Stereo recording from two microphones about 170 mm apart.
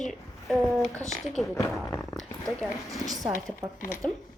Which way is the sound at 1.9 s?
15° left (ahead or behind).